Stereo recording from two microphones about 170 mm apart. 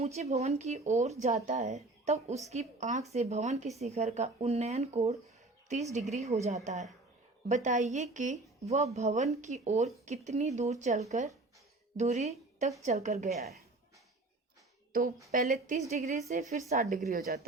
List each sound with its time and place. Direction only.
0.0 s a woman's voice: 40° right (ahead or behind)
14.9 s a woman's voice: 55° right (ahead or behind)
16.9 s a woman's voice: 65° right (ahead or behind)